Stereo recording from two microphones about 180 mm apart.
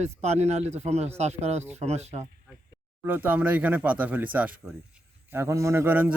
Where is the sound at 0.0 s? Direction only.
40° right (ahead or behind).